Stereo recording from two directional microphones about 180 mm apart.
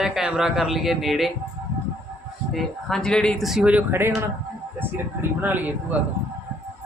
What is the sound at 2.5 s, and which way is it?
Speech, 5° left (ahead or behind).